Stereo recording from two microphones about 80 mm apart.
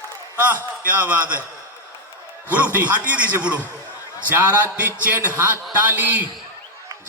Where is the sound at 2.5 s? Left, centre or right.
Centre.